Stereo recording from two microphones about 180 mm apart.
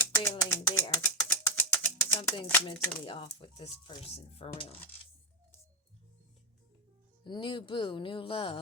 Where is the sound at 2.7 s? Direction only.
25° left (ahead or behind).